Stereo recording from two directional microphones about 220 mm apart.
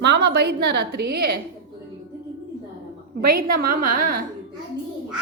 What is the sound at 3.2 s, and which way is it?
A woman's voice, 40° right (ahead or behind).